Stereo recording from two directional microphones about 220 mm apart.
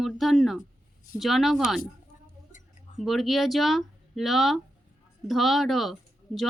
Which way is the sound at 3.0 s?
Centre (ahead or behind).